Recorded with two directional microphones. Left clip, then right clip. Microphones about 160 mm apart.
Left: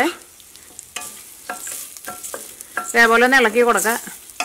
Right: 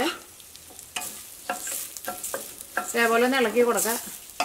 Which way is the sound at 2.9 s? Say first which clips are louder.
Left 9 dB; 30° left (ahead or behind).